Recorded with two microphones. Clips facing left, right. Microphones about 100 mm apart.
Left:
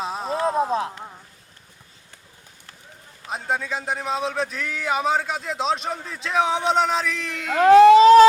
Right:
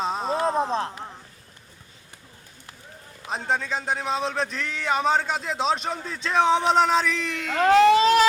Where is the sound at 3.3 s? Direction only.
5° left (ahead or behind).